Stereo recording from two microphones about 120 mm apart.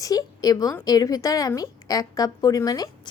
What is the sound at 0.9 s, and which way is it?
Speech, 30° left (ahead or behind).